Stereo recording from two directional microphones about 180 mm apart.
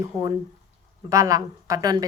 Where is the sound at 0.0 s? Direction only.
20° right (ahead or behind).